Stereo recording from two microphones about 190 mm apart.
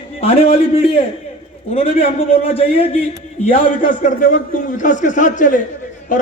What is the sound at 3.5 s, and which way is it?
A man's voice, 45° left (ahead or behind).